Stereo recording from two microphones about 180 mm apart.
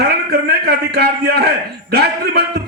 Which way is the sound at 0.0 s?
65° right (ahead or behind).